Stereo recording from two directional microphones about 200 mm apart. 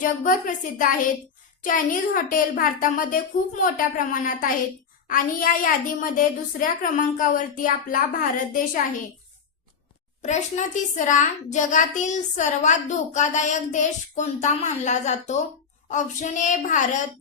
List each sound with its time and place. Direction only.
0.0 s a child's voice: 40° left (ahead or behind)
10.2 s a child's voice: 35° left (ahead or behind)